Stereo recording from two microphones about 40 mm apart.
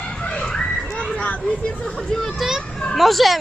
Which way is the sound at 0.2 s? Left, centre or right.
Left.